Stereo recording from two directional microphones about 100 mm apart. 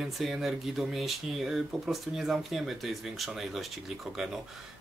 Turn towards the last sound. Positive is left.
turn(degrees=0)  # may be behind; listen again after turning